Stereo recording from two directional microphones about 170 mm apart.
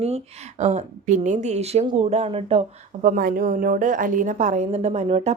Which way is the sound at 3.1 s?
55° right (ahead or behind).